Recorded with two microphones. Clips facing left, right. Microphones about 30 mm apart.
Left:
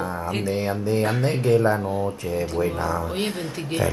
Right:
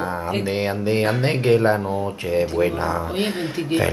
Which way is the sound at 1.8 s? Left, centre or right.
Centre.